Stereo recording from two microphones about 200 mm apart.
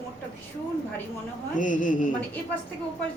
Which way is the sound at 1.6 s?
40° left (ahead or behind).